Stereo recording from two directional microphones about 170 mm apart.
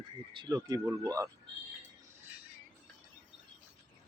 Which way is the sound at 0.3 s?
25° right (ahead or behind).